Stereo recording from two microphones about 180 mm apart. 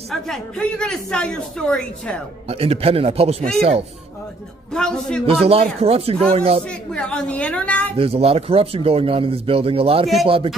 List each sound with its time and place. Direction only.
0.1 s speech: 5° left (ahead or behind)
2.4 s a man's voice: 35° right (ahead or behind)
4.7 s speech: 5° left (ahead or behind)
5.2 s a man's voice: 30° right (ahead or behind)
6.7 s a woman's voice: 5° left (ahead or behind)
8.0 s a man's voice: 35° right (ahead or behind)